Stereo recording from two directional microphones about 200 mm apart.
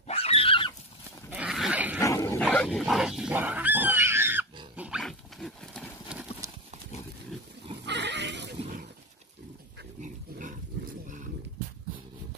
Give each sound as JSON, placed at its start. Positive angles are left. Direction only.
{"t": 0.0, "sound": "horse", "side_deg": 30}
{"t": 1.3, "sound": "dog", "side_deg": -5}
{"t": 2.0, "sound": "dog", "side_deg": 15}
{"t": 2.5, "sound": "dog", "side_deg": 5}
{"t": 6.4, "sound": "clip-clop", "side_deg": -15}
{"t": 7.8, "sound": "pig", "side_deg": -60}
{"t": 10.0, "sound": "pig", "side_deg": -40}